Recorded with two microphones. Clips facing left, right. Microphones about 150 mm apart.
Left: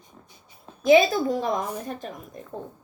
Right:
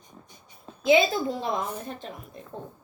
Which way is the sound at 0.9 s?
45° left (ahead or behind).